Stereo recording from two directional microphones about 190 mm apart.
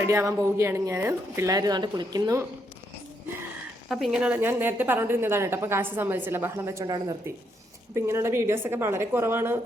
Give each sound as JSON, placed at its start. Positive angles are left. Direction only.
{"t": 0.1, "sound": "a woman's voice", "side_deg": -15}
{"t": 3.8, "sound": "a woman's voice", "side_deg": 0}